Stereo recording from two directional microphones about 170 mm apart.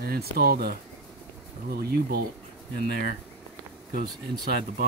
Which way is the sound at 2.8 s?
75° left (ahead or behind).